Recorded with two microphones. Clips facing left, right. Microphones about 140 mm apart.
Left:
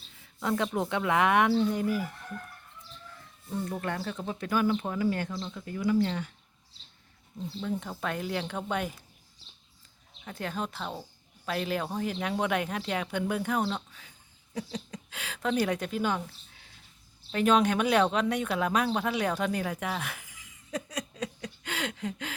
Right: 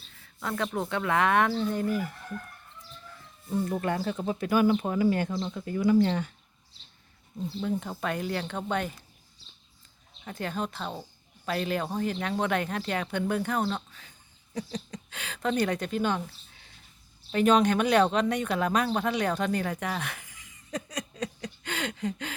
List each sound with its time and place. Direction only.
0.4 s speech: 15° left (ahead or behind)
3.5 s speech: 10° right (ahead or behind)
5.3 s speech: 35° right (ahead or behind)
7.6 s speech: 5° right (ahead or behind)
10.2 s speech: centre (ahead or behind)